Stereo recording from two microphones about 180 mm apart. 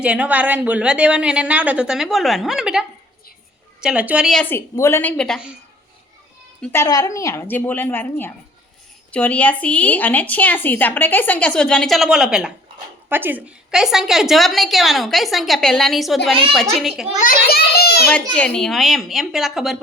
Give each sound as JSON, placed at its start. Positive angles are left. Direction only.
{"t": 0.0, "sound": "a woman's voice", "side_deg": -5}
{"t": 6.6, "sound": "a woman's voice", "side_deg": 10}
{"t": 17.2, "sound": "a child's voice", "side_deg": 55}
{"t": 18.3, "sound": "a woman's voice", "side_deg": 5}